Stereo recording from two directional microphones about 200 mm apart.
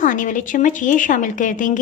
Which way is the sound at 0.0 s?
40° left (ahead or behind).